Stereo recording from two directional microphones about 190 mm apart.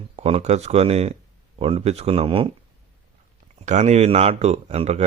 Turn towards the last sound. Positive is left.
turn(degrees=-35)  # may be behind; listen again after turning